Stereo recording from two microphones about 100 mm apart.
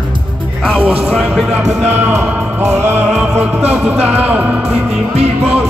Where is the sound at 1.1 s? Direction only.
5° right (ahead or behind).